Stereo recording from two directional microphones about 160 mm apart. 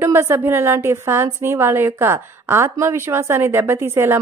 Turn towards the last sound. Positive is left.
turn(degrees=-15)  # may be behind; listen again after turning